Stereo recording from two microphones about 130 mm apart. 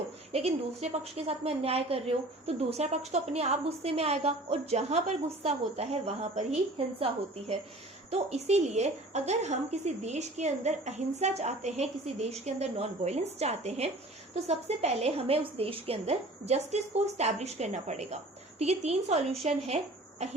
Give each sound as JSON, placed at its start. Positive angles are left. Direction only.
{"t": 0.3, "sound": "a woman's voice", "side_deg": -50}